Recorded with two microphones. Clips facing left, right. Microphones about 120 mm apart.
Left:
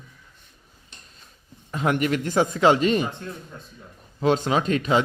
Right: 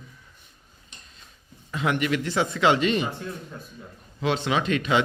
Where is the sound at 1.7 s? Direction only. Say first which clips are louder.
Left 2 dB; 45° left (ahead or behind).